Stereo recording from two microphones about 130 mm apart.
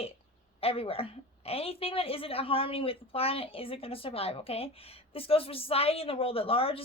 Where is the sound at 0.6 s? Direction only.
50° left (ahead or behind).